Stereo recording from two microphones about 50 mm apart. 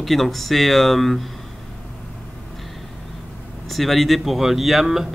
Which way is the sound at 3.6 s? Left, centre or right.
Centre.